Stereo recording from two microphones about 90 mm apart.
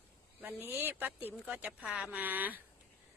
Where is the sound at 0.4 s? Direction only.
20° right (ahead or behind).